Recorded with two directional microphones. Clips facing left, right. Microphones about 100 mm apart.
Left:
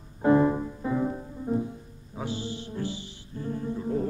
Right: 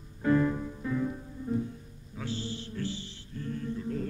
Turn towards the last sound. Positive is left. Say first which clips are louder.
# left 5 dB
turn(degrees=25)  # may be behind; listen again after turning